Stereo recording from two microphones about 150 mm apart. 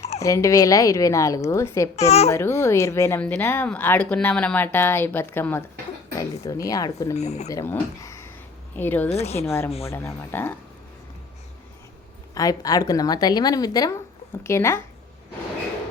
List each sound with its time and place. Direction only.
0.2 s a woman's voice: 20° left (ahead or behind)
2.0 s speech: 45° left (ahead or behind)
2.3 s a woman's voice: 15° left (ahead or behind)
7.2 s speech: 50° left (ahead or behind)
7.4 s a woman's voice: 20° left (ahead or behind)
9.0 s speech: 45° left (ahead or behind)
9.4 s speech: 20° left (ahead or behind)
12.3 s a woman's voice: 25° left (ahead or behind)